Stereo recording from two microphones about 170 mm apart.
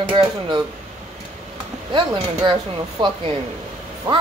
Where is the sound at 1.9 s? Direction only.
30° right (ahead or behind).